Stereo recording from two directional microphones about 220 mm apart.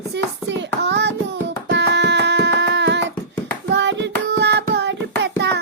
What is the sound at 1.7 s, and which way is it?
Music, 50° right (ahead or behind).